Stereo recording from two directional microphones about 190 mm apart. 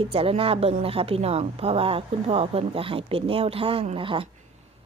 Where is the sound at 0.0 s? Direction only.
30° right (ahead or behind).